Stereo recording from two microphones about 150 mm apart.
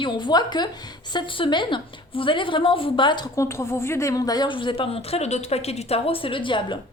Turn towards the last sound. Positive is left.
turn(degrees=35)  # may be behind; listen again after turning